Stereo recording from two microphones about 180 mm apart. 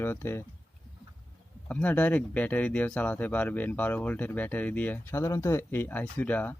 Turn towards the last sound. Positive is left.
turn(degrees=10)  # may be behind; listen again after turning